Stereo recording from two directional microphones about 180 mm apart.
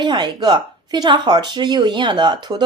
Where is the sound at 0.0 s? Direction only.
25° right (ahead or behind).